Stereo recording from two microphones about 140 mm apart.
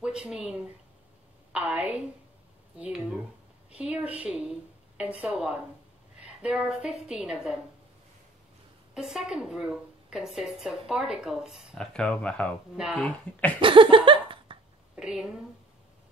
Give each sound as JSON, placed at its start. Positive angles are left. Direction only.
{"t": 0.0, "sound": "a woman's voice", "side_deg": -5}
{"t": 3.7, "sound": "a woman's voice", "side_deg": -10}
{"t": 8.9, "sound": "a woman's voice", "side_deg": -5}
{"t": 12.7, "sound": "a woman's voice", "side_deg": -5}
{"t": 13.0, "sound": "speech", "side_deg": 10}
{"t": 13.6, "sound": "a sound", "side_deg": -35}
{"t": 15.0, "sound": "speech", "side_deg": -5}